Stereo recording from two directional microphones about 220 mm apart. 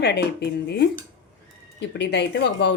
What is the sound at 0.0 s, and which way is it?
Speech, 50° left (ahead or behind).